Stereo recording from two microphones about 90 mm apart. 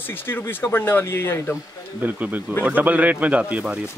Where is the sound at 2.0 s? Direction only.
20° right (ahead or behind).